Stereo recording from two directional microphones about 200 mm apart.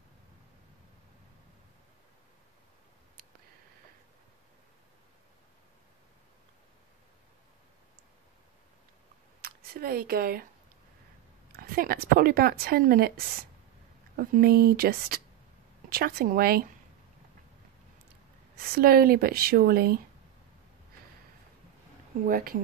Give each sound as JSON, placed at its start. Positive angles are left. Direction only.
{"t": 9.4, "sound": "speech", "side_deg": -50}
{"t": 11.5, "sound": "speech", "side_deg": -50}
{"t": 18.8, "sound": "speech", "side_deg": -50}
{"t": 22.2, "sound": "speech", "side_deg": -45}